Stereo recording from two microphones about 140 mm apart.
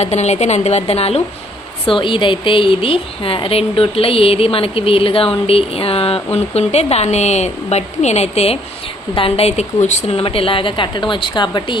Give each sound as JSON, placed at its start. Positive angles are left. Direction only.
{"t": 0.0, "sound": "a woman's voice", "side_deg": 50}